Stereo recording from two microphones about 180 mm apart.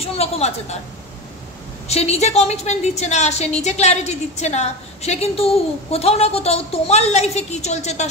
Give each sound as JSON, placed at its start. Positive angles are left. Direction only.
{"t": 0.0, "sound": "a woman's voice", "side_deg": 35}
{"t": 1.9, "sound": "a woman's voice", "side_deg": 35}